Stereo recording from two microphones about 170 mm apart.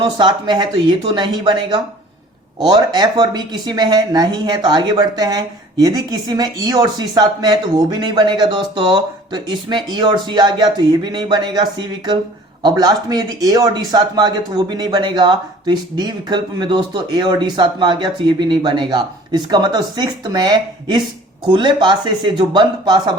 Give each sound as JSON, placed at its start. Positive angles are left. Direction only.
{"t": 0.2, "sound": "speech", "side_deg": -25}